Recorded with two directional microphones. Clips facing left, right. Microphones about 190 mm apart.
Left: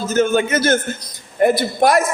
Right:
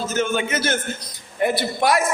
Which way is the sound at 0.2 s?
45° left (ahead or behind).